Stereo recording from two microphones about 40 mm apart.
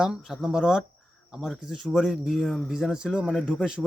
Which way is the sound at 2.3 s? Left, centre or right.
Centre.